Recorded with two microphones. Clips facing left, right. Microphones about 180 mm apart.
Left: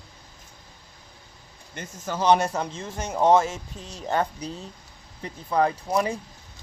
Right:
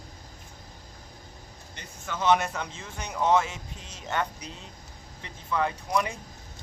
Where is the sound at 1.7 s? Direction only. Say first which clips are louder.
Left 6 dB; 45° left (ahead or behind).